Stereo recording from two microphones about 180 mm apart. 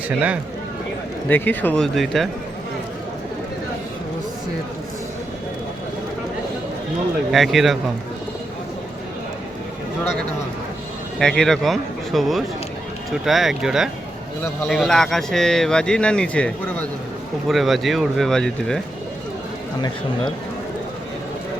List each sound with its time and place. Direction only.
1.3 s speech: 10° left (ahead or behind)
7.3 s speech: centre (ahead or behind)
11.2 s speech: 5° left (ahead or behind)